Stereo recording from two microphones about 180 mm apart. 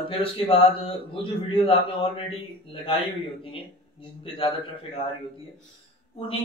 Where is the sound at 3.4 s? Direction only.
30° left (ahead or behind).